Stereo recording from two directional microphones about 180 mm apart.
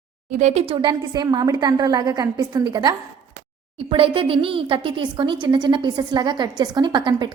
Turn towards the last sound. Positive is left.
turn(degrees=-25)  # may be behind; listen again after turning